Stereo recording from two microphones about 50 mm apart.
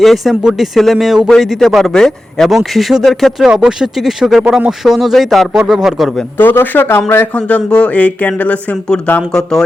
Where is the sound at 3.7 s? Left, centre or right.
Centre.